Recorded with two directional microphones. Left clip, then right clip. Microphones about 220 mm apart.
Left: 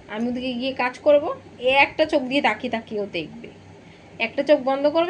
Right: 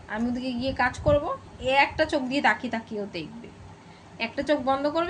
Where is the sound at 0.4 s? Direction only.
20° right (ahead or behind).